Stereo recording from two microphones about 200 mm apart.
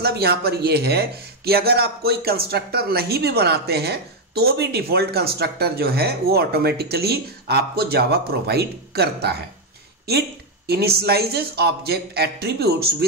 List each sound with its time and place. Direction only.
0.0 s speech: 50° right (ahead or behind)
10.7 s speech: 55° right (ahead or behind)